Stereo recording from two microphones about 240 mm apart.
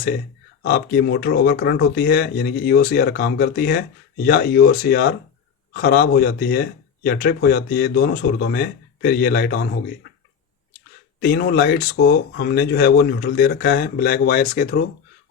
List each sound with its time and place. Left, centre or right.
0.6 s speech: left
11.2 s speech: left